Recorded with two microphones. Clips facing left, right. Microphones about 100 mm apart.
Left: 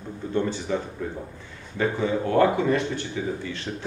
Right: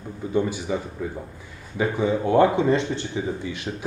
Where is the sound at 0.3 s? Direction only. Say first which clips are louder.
Right 1 dB; 10° right (ahead or behind).